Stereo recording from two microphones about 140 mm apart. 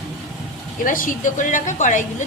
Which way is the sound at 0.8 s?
75° left (ahead or behind).